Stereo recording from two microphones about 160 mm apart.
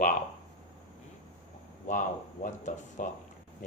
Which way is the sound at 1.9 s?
55° left (ahead or behind).